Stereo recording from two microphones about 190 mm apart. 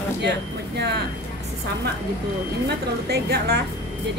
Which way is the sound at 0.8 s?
60° right (ahead or behind).